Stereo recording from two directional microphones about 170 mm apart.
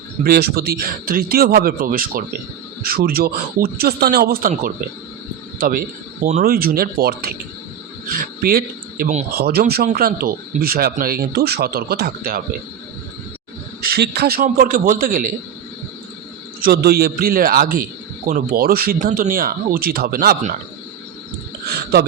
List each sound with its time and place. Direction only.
0.3 s speech: 65° right (ahead or behind)
13.8 s speech: 75° right (ahead or behind); by 15.4 s 55° right (ahead or behind)
16.6 s speech: 65° right (ahead or behind)
18.9 s speech: 50° right (ahead or behind)